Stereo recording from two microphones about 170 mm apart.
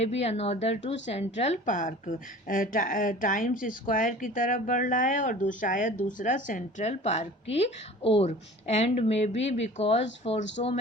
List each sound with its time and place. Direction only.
0.0 s a woman's voice: 40° left (ahead or behind)